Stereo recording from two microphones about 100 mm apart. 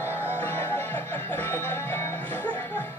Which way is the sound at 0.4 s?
20° left (ahead or behind).